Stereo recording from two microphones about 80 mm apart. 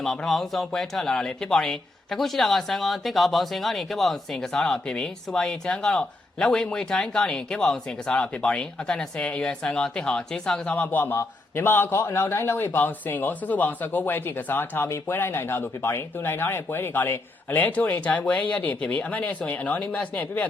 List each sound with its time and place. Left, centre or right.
0.0 s a man's voice: centre